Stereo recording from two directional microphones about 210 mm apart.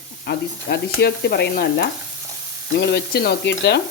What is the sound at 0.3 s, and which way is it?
Speech, 55° left (ahead or behind).